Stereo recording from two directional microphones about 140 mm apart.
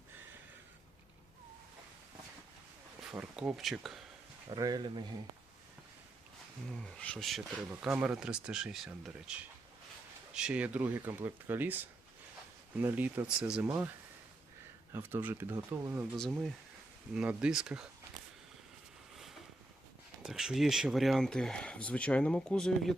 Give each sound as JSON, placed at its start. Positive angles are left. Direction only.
{"t": 3.1, "sound": "speech", "side_deg": -5}
{"t": 4.4, "sound": "speech", "side_deg": -30}
{"t": 6.7, "sound": "speech", "side_deg": 5}
{"t": 12.8, "sound": "speech", "side_deg": -15}
{"t": 14.9, "sound": "speech", "side_deg": -15}
{"t": 17.2, "sound": "speech", "side_deg": -5}
{"t": 20.2, "sound": "speech", "side_deg": -5}